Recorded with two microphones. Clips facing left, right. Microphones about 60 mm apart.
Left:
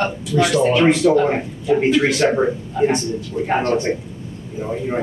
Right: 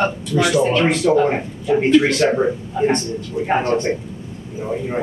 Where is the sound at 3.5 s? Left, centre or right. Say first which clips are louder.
Right 1 dB; centre.